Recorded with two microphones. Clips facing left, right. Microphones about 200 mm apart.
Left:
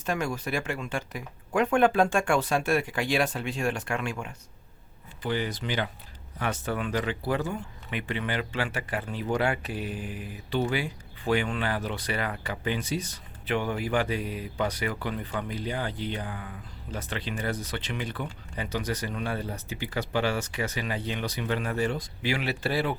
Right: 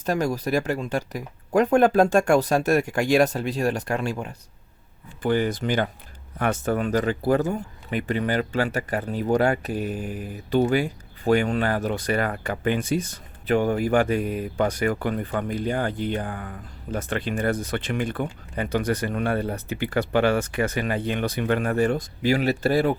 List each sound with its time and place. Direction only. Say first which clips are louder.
0.0 s speech: right 6 dB; 40° right (ahead or behind)
5.2 s speech: right 7 dB; 50° right (ahead or behind)